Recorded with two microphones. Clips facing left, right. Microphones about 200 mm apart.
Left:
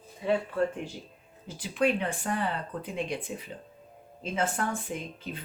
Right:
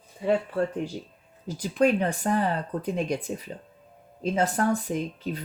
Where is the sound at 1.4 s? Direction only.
40° right (ahead or behind).